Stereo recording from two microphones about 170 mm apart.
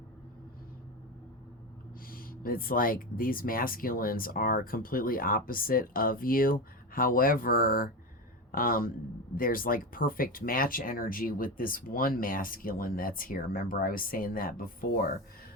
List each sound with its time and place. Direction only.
2.0 s speech: 60° left (ahead or behind)